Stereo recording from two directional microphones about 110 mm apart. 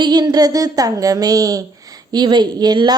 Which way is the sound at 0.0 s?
40° right (ahead or behind).